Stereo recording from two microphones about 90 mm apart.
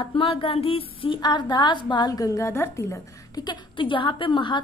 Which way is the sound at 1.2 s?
50° left (ahead or behind).